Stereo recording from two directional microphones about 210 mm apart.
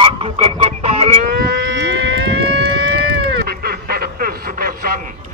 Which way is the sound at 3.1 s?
45° right (ahead or behind).